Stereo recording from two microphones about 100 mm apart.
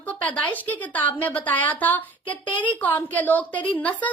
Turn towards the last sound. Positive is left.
turn(degrees=15)  # may be behind; listen again after turning